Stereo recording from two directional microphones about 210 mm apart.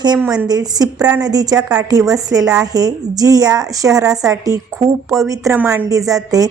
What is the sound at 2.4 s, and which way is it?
Speech, 5° right (ahead or behind).